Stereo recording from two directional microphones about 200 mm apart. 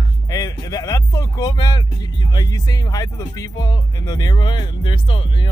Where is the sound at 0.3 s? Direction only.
15° left (ahead or behind).